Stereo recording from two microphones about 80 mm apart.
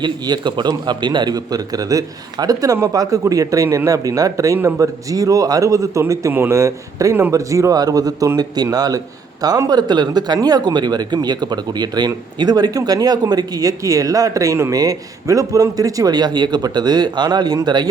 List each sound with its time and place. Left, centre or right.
0.0 s speech: right